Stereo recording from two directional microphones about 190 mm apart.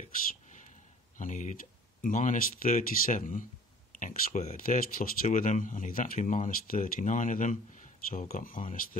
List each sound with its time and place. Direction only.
0.0 s whispering: 40° left (ahead or behind)
1.1 s speech: 40° left (ahead or behind)